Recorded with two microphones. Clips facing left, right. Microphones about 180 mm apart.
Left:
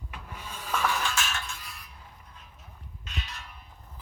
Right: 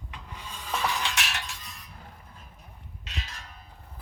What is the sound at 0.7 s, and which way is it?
Cutlery, 15° right (ahead or behind).